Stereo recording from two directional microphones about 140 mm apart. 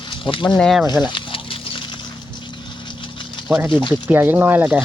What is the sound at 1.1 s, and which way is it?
Pig, 35° left (ahead or behind).